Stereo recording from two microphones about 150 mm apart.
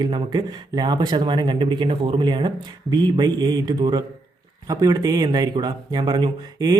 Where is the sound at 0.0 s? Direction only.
30° right (ahead or behind).